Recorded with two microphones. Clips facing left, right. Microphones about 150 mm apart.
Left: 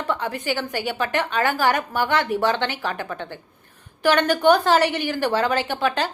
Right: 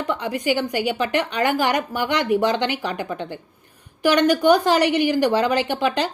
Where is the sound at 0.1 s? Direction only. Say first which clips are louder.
Right 3 dB; 15° right (ahead or behind).